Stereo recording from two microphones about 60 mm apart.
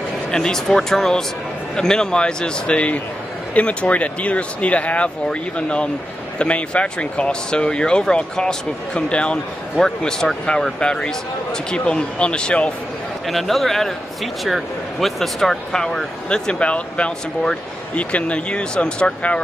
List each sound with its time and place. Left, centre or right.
0.3 s speech: centre
13.3 s speech: centre